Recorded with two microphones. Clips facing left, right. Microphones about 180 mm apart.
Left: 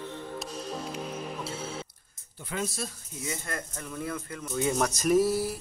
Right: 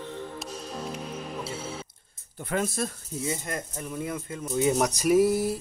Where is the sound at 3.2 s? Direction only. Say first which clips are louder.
Right 4 dB; 25° right (ahead or behind).